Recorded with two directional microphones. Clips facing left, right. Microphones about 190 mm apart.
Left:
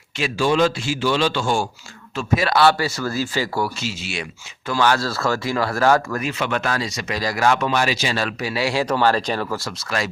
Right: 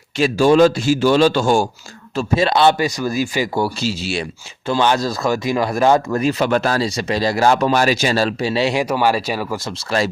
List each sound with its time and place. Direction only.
0.2 s a man's voice: 45° right (ahead or behind)
2.1 s speech: 25° right (ahead or behind)
3.6 s speech: 35° right (ahead or behind)
6.1 s speech: 35° right (ahead or behind)
8.2 s speech: 30° right (ahead or behind); by 9.6 s 10° right (ahead or behind)
9.6 s speech: 30° right (ahead or behind)